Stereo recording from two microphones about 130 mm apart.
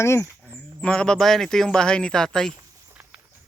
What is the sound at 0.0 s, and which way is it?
Speech, 20° left (ahead or behind).